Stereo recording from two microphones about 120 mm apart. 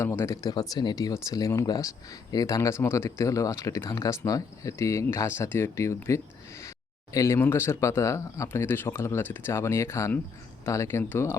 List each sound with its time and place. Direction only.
0.0 s speech: 20° left (ahead or behind)
0.5 s speech: 35° left (ahead or behind)